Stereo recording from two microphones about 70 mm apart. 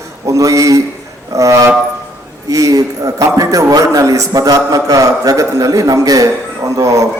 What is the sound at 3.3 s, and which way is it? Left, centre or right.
A man's voice, right.